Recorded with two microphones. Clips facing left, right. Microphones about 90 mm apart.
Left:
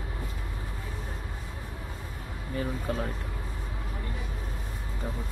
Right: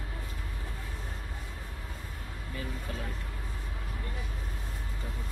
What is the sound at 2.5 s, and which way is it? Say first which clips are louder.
Speech: left 8 dB; 45° left (ahead or behind).